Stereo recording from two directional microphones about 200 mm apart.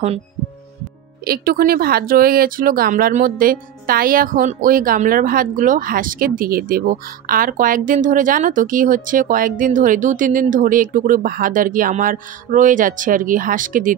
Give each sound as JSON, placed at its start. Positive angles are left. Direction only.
{"t": 1.2, "sound": "speech", "side_deg": -50}